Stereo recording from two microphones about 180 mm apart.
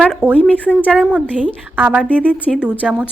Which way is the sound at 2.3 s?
5° left (ahead or behind).